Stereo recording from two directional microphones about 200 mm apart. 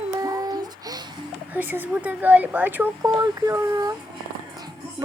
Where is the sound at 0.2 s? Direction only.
20° right (ahead or behind).